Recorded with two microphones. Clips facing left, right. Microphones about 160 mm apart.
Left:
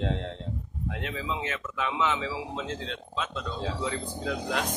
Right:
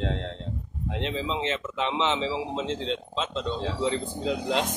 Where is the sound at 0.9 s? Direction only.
25° right (ahead or behind).